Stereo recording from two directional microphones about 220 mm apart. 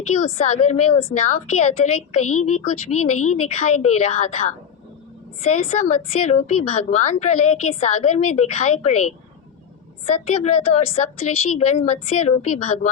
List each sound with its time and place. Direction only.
0.1 s a woman's voice: 30° left (ahead or behind)